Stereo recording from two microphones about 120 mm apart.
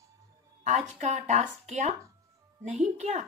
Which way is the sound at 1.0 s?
80° right.